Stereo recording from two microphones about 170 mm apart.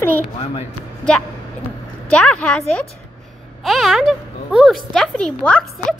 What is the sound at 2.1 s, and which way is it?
Speech, 5° left (ahead or behind).